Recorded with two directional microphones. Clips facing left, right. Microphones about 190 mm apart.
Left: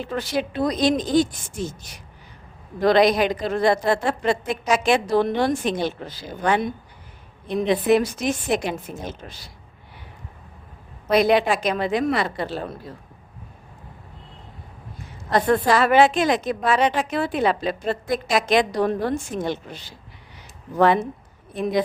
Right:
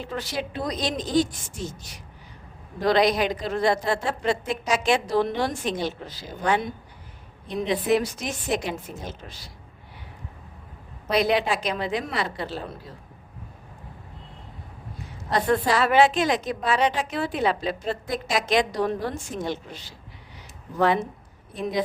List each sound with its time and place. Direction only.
0.1 s a woman's voice: 55° left (ahead or behind)
2.8 s a woman's voice: 55° left (ahead or behind)
11.1 s a woman's voice: 50° left (ahead or behind)
15.3 s a woman's voice: 50° left (ahead or behind)